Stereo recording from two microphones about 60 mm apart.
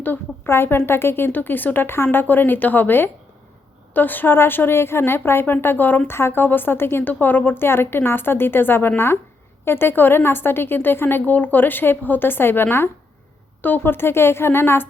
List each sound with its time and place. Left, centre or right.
0.0 s a woman's voice: left
6.1 s a woman's voice: left